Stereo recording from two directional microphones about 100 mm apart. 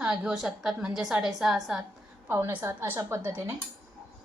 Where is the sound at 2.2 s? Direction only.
25° right (ahead or behind).